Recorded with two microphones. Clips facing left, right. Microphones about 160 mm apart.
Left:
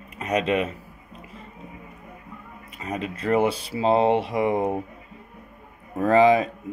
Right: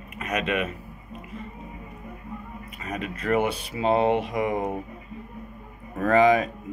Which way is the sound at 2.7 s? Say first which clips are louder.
Left 3 dB; 30° left (ahead or behind).